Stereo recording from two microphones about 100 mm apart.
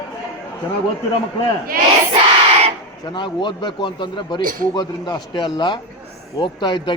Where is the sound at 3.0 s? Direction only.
50° left (ahead or behind).